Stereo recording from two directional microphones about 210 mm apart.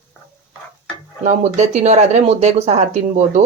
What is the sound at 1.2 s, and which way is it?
A woman's voice, 35° right (ahead or behind).